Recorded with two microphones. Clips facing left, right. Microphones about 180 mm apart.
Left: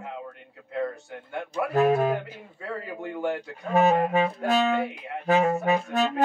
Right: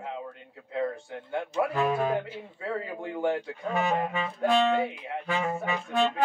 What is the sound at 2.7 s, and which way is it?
Speech, 5° right (ahead or behind).